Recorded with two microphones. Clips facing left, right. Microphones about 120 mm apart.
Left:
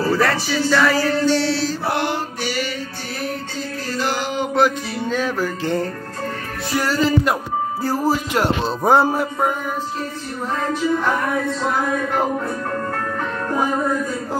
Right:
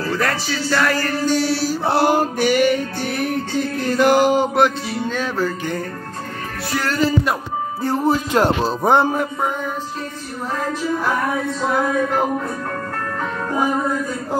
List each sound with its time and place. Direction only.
0.2 s music: centre (ahead or behind)
1.9 s music: 40° right (ahead or behind); by 3.3 s 55° right (ahead or behind)
3.8 s mantra: 55° right (ahead or behind)
4.6 s music: 5° left (ahead or behind)
6.8 s speech: 10° left (ahead or behind)
7.8 s music: 5° left (ahead or behind)